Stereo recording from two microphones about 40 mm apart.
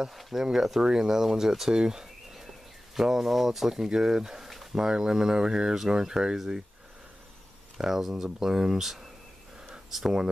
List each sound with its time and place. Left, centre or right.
0.0 s speech: centre
7.7 s speech: centre